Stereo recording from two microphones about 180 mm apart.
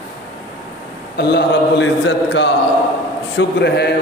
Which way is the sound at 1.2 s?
75° left (ahead or behind).